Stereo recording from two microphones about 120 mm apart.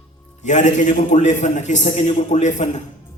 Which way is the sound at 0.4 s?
90° left.